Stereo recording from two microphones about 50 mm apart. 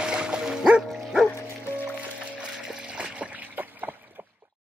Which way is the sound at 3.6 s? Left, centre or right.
Right.